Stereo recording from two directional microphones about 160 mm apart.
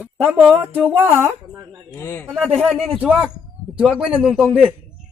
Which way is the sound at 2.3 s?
Centre (ahead or behind).